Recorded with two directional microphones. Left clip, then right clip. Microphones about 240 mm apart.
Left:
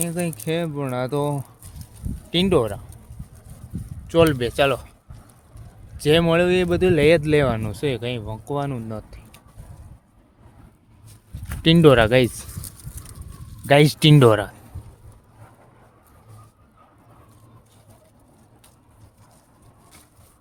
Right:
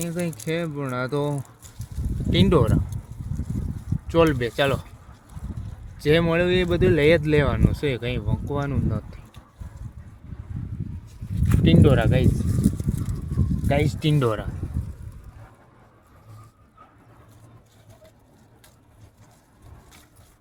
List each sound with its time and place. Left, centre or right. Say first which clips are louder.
0.0 s speech: left 2 dB; centre
4.0 s speech: left 2 dB; centre
6.0 s speech: left 3 dB; centre
11.6 s speech: left 6 dB; left